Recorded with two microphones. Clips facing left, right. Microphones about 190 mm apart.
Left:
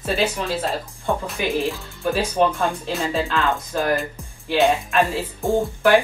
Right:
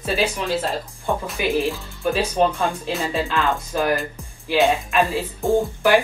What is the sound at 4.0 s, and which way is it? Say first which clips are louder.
Speech: left 1 dB; centre (ahead or behind).